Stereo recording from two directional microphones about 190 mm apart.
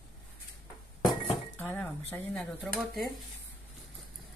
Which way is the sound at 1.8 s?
5° left (ahead or behind).